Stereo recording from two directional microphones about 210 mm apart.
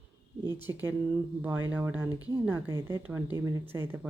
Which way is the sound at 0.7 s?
15° right (ahead or behind).